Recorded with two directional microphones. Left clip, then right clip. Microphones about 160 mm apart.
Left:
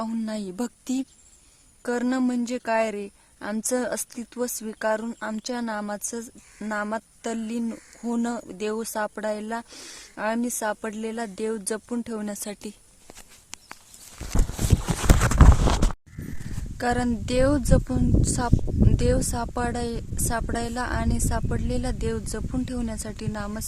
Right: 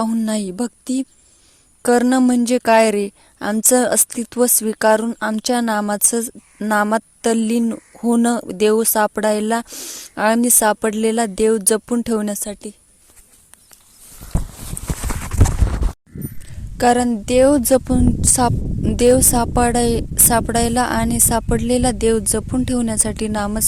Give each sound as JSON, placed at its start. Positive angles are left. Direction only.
{"t": 0.1, "sound": "speech", "side_deg": -40}
{"t": 0.5, "sound": "a woman's voice", "side_deg": -30}
{"t": 1.8, "sound": "a woman's voice", "side_deg": -45}
{"t": 9.6, "sound": "speech", "side_deg": -35}
{"t": 10.2, "sound": "a woman's voice", "side_deg": -50}
{"t": 12.3, "sound": "a woman's voice", "side_deg": -25}
{"t": 16.7, "sound": "a woman's voice", "side_deg": -40}